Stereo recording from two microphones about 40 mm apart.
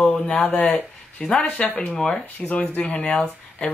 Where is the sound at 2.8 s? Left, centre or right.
Left.